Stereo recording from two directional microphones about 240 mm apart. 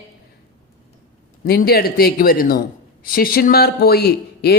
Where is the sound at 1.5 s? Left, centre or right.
Left.